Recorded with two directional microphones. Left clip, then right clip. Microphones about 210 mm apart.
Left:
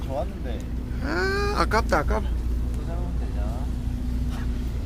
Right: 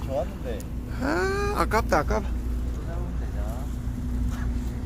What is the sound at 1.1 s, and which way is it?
Speech, 10° right (ahead or behind).